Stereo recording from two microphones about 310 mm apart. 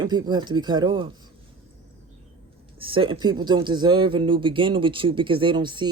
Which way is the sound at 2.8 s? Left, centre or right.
Centre.